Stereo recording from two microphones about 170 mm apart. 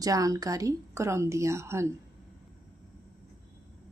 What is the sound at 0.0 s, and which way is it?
Speech, 20° right (ahead or behind).